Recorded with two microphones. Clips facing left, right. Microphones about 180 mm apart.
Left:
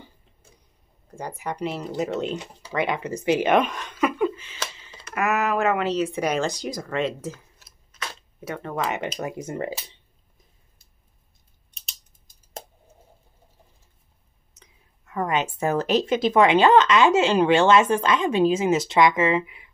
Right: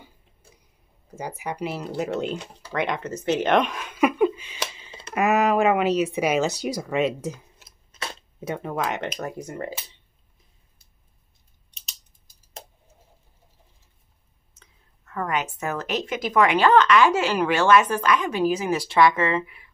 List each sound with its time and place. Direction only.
1.0 s speech: 5° right (ahead or behind)
2.7 s a sound: 5° left (ahead or behind); by 5.0 s 15° right (ahead or behind)
5.0 s speech: 20° right (ahead or behind)
8.0 s camera: 20° right (ahead or behind)
8.6 s speech: centre (ahead or behind)
9.4 s a woman's voice: 20° left (ahead or behind)
14.5 s a woman's voice: 15° left (ahead or behind)